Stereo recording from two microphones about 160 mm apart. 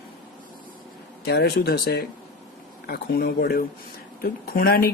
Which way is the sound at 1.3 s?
75° left (ahead or behind).